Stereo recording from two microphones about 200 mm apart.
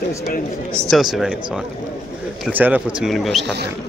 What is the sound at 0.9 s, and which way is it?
Speech, centre (ahead or behind).